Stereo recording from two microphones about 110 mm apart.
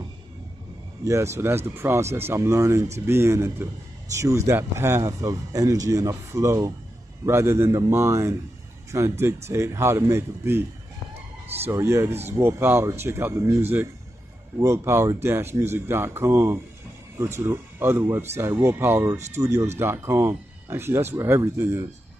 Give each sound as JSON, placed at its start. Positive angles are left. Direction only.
{"t": 1.0, "sound": "speech", "side_deg": -25}
{"t": 11.7, "sound": "speech", "side_deg": -25}